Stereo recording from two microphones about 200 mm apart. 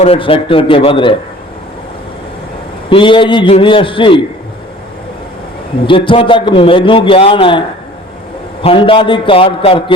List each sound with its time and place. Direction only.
0.0 s a man's voice: 30° left (ahead or behind)
2.9 s a man's voice: 25° left (ahead or behind)
5.8 s a man's voice: 25° left (ahead or behind)
8.6 s a man's voice: 25° left (ahead or behind)